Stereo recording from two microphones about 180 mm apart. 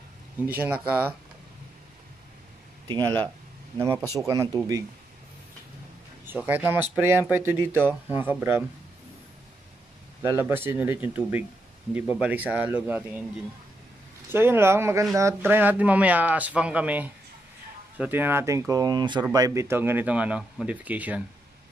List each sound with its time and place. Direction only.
0.5 s speech: 10° right (ahead or behind)
2.9 s speech: 25° right (ahead or behind)
3.7 s speech: 10° right (ahead or behind)
6.2 s speech: 10° right (ahead or behind)
10.2 s speech: 10° right (ahead or behind)
14.3 s speech: 10° right (ahead or behind)